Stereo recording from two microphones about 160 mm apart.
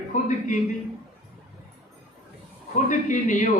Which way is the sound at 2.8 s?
50° left (ahead or behind).